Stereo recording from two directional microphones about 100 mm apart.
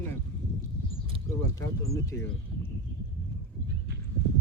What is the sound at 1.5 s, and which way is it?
Speech, 35° left (ahead or behind).